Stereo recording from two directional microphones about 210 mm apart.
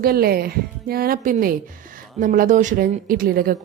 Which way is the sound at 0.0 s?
45° right (ahead or behind).